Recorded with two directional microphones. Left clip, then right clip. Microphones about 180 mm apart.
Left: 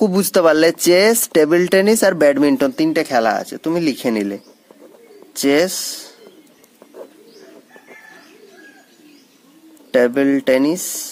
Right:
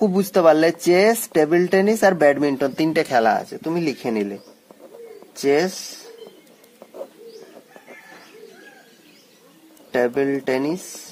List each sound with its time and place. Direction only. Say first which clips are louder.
0.0 s speech: left 2 dB; 50° left (ahead or behind)
2.7 s speech: left 2 dB; 15° left (ahead or behind)
3.6 s speech: left 5 dB; 45° left (ahead or behind)
9.8 s speech: left 5 dB; 45° left (ahead or behind)